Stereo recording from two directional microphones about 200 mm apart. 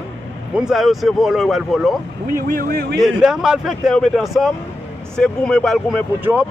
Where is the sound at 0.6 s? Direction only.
Centre (ahead or behind).